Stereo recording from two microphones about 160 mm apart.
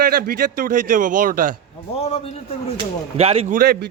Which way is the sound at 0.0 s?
70° right (ahead or behind).